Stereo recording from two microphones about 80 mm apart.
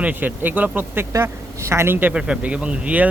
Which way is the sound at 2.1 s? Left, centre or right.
Centre.